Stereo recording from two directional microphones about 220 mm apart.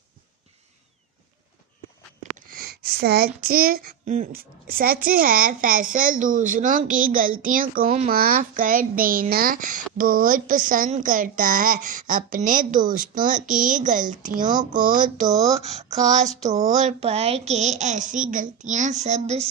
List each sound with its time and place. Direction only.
2.3 s a sound: 40° right (ahead or behind)
3.4 s a child's voice: 40° right (ahead or behind)
14.4 s speech: 20° right (ahead or behind)
14.8 s a child's voice: 40° right (ahead or behind)
15.3 s speech: 15° right (ahead or behind)
15.6 s a child's voice: 30° right (ahead or behind)